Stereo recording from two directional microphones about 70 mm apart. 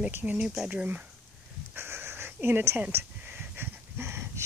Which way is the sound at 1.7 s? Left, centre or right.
Right.